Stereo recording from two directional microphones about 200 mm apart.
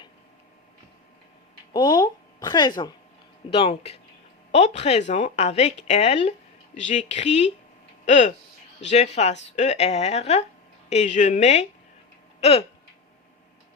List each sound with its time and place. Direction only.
1.7 s speech: 20° left (ahead or behind)